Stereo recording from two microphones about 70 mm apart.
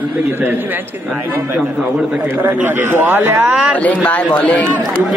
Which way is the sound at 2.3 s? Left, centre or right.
Right.